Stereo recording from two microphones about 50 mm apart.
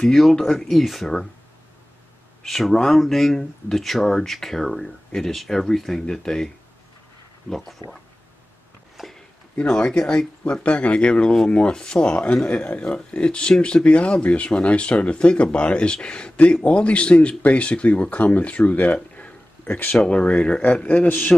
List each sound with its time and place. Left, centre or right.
0.2 s speech: centre
2.4 s speech: centre
9.0 s a sound: centre
9.7 s speech: centre
10.4 s speech: left
20.1 s speech: left